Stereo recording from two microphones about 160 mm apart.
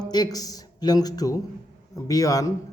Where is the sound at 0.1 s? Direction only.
25° left (ahead or behind).